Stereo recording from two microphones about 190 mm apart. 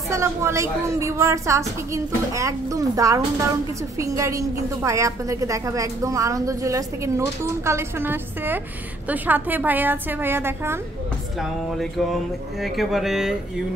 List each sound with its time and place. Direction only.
0.1 s a woman's voice: 15° right (ahead or behind)
12.6 s speech: centre (ahead or behind)